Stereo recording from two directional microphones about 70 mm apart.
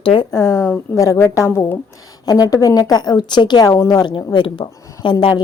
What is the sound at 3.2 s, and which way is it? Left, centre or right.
Speech, left.